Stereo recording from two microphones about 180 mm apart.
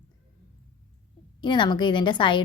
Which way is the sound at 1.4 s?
25° left (ahead or behind).